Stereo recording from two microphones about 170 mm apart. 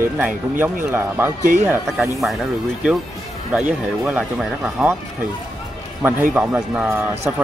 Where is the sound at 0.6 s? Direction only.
10° right (ahead or behind).